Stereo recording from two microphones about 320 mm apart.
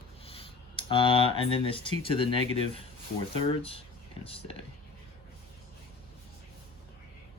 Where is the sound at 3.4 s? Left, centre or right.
Centre.